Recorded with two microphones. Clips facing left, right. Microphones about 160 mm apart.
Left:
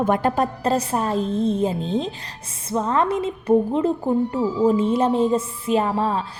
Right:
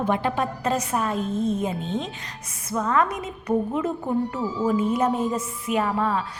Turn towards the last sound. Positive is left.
turn(degrees=30)  # may be behind; listen again after turning